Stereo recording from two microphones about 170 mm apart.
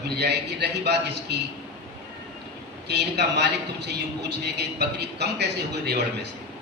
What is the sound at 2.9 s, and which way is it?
A man's voice, 85° right.